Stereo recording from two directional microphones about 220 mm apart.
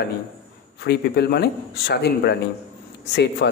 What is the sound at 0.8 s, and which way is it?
A man's voice, 50° left (ahead or behind).